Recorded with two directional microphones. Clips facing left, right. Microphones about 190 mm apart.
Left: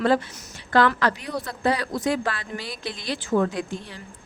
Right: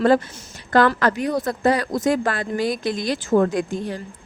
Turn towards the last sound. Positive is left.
turn(degrees=-45)  # may be behind; listen again after turning